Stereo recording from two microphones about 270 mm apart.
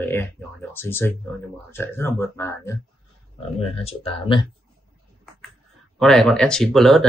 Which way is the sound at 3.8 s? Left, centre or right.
Left.